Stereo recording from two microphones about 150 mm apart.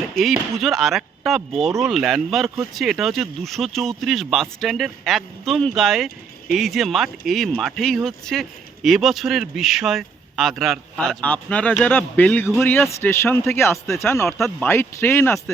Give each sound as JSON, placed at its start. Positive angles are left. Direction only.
{"t": 0.6, "sound": "speech", "side_deg": 0}
{"t": 14.3, "sound": "speech", "side_deg": 0}
{"t": 14.7, "sound": "speech", "side_deg": 15}